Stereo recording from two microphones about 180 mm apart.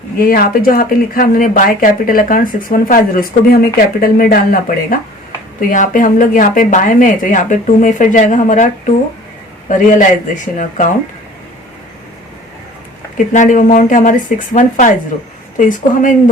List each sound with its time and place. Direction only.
0.2 s speech: 55° left (ahead or behind)
5.5 s speech: 45° left (ahead or behind)
13.1 s speech: 45° left (ahead or behind)